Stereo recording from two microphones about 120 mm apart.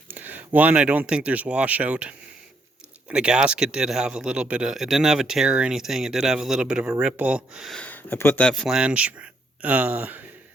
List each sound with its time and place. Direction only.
0.1 s speech: 15° right (ahead or behind)
7.8 s speech: 15° left (ahead or behind)
8.5 s speech: 5° right (ahead or behind)